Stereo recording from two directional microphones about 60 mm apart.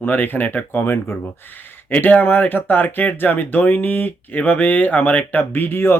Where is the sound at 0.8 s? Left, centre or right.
Left.